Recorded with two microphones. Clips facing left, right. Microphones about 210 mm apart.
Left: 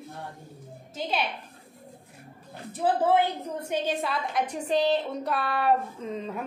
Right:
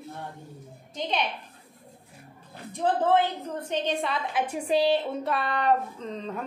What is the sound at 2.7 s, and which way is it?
A woman's voice, 10° left (ahead or behind).